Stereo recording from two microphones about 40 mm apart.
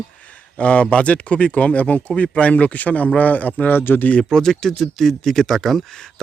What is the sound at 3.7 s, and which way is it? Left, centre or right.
Speech, left.